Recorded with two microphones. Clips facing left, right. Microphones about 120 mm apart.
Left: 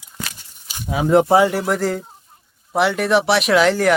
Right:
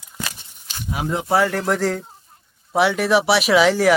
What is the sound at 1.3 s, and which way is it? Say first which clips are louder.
Speech: left 3 dB; 15° left (ahead or behind).